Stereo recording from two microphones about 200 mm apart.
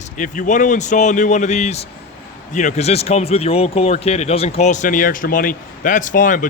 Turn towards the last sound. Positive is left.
turn(degrees=40)  # may be behind; listen again after turning